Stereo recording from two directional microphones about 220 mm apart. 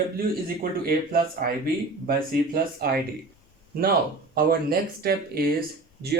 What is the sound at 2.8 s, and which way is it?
Speech, 45° right (ahead or behind).